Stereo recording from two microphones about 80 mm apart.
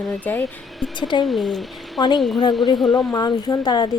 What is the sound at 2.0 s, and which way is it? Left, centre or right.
Speech, left.